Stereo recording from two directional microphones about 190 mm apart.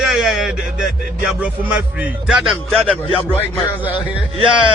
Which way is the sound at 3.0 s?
30° left (ahead or behind).